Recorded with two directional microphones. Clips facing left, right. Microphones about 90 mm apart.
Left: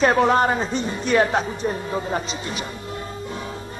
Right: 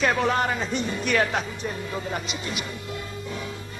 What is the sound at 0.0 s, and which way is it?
A man's voice, 35° left (ahead or behind).